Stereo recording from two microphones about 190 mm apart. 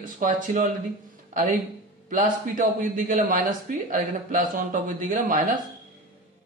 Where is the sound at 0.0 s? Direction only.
45° right (ahead or behind).